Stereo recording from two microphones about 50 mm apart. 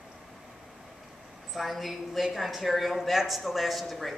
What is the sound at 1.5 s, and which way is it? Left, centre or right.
Speech, centre.